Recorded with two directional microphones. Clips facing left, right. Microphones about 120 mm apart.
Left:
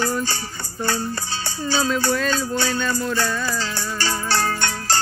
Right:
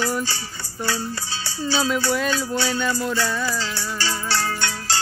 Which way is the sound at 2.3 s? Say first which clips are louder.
Left 1 dB; 50° left (ahead or behind).